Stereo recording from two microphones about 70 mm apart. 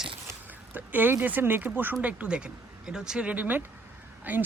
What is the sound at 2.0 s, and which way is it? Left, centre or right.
Speech, centre.